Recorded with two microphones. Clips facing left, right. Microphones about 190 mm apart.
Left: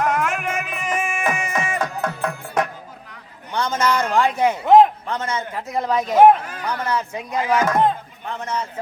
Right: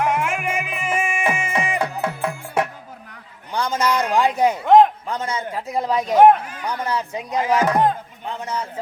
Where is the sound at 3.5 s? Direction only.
15° right (ahead or behind).